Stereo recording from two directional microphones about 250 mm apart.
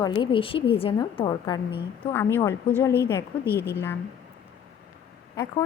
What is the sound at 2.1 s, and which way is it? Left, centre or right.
A woman's voice, centre.